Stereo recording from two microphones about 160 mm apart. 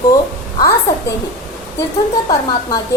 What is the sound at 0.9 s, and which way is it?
Speech, 15° left (ahead or behind).